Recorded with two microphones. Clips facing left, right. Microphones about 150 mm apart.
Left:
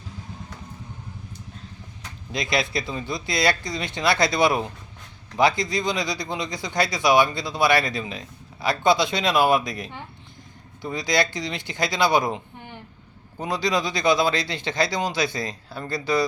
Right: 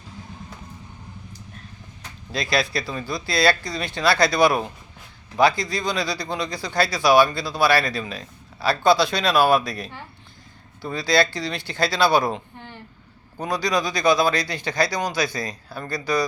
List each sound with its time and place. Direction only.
2.3 s speech: 20° left (ahead or behind)